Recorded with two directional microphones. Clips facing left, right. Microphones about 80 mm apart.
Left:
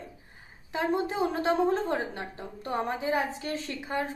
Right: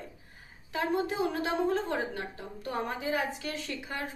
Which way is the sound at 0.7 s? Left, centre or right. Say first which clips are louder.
Left 2 dB; left.